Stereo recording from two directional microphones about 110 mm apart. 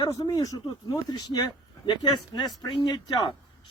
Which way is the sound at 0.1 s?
30° left (ahead or behind).